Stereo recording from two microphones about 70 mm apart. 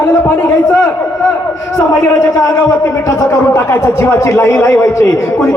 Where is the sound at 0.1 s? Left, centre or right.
Left.